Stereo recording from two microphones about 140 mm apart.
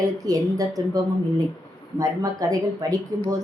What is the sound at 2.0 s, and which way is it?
A woman's voice, 25° right (ahead or behind).